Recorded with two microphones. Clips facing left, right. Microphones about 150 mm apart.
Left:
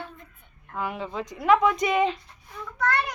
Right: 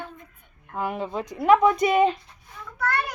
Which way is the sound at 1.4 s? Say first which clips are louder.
Right 3 dB; 35° right (ahead or behind).